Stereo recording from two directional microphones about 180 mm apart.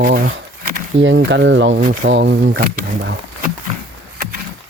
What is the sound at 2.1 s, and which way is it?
Speech, 80° right.